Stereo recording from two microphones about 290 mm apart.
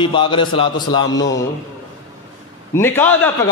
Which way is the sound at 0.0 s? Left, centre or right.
Centre.